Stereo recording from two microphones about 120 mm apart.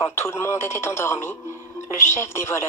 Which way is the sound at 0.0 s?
20° left (ahead or behind).